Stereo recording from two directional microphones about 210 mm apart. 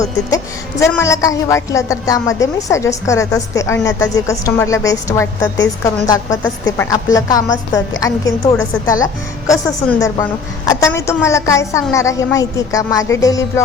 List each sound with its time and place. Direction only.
0.0 s a woman's voice: 15° left (ahead or behind)